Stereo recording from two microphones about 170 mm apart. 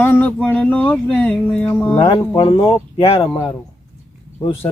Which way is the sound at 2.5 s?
15° left (ahead or behind).